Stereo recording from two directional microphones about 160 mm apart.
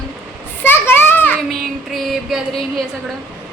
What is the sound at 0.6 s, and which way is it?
Children playing, 15° left (ahead or behind).